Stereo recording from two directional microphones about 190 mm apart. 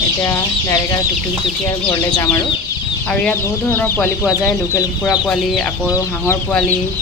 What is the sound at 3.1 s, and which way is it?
Speech, 10° left (ahead or behind).